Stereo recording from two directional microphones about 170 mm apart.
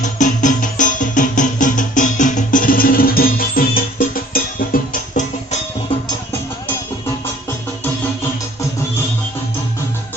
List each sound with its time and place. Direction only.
0.0 s music: 45° left (ahead or behind)